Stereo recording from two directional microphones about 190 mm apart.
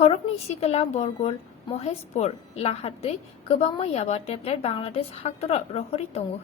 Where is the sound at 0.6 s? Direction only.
35° left (ahead or behind).